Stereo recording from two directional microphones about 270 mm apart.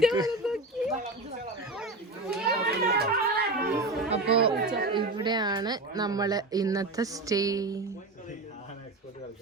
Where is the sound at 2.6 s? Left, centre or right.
Right.